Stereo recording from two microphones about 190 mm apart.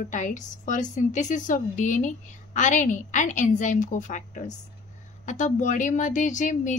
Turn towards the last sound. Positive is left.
turn(degrees=40)  # may be behind; listen again after turning